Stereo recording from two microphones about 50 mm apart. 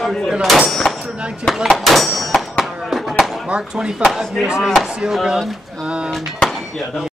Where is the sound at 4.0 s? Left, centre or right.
Centre.